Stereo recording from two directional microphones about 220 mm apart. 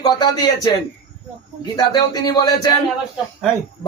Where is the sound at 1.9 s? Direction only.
15° left (ahead or behind).